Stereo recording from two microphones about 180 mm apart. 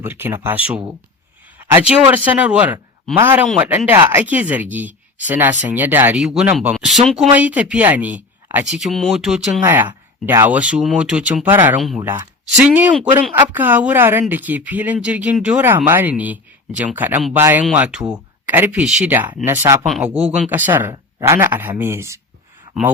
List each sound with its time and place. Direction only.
0.0 s speech: 10° right (ahead or behind)